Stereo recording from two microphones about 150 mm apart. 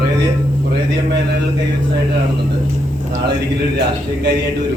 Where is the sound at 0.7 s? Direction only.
90° right.